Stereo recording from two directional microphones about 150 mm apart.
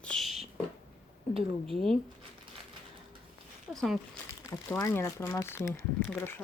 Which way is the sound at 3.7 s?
5° left (ahead or behind).